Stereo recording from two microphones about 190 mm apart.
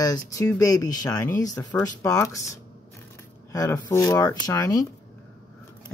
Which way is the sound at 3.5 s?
20° left (ahead or behind).